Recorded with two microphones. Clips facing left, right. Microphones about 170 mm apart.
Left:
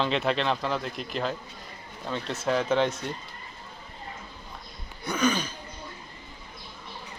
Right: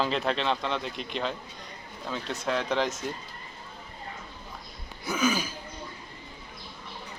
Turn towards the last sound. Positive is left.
turn(degrees=-5)  # may be behind; listen again after turning